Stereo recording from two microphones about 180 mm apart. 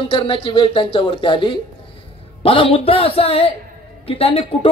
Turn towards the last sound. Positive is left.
turn(degrees=30)  # may be behind; listen again after turning